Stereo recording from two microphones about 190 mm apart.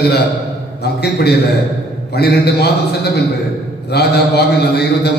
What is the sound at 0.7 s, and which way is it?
A man's voice, 60° left (ahead or behind).